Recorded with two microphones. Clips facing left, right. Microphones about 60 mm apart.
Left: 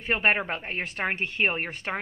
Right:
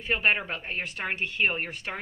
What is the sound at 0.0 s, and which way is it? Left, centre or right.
Speech, left.